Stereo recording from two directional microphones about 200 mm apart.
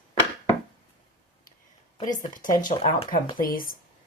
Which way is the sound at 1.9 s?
20° left (ahead or behind).